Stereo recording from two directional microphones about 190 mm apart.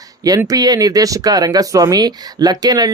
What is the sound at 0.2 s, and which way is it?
Speech, 20° right (ahead or behind).